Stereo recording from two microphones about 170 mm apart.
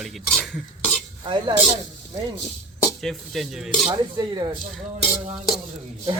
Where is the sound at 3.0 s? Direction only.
Centre (ahead or behind).